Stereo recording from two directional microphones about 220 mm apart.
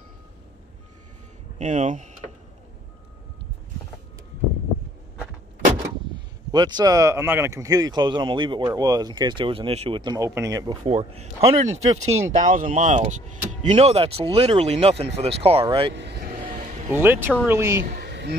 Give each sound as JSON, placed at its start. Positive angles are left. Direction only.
{"t": 1.6, "sound": "speech", "side_deg": -35}
{"t": 6.5, "sound": "speech", "side_deg": -20}
{"t": 15.9, "sound": "vehicle", "side_deg": -50}
{"t": 16.9, "sound": "a woman's voice", "side_deg": -10}
{"t": 17.8, "sound": "a sound", "side_deg": -50}